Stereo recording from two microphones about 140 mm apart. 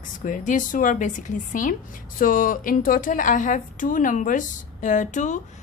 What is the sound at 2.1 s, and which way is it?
A woman's voice, 80° left.